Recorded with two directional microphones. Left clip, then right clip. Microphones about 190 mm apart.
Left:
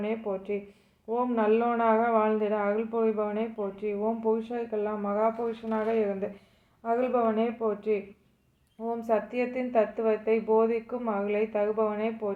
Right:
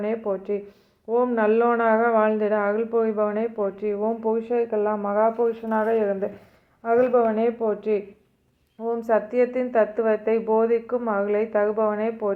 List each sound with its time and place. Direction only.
0.0 s speech: 20° right (ahead or behind)